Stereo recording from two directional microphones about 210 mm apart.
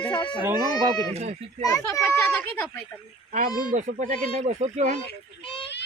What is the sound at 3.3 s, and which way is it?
Speech, 40° right (ahead or behind).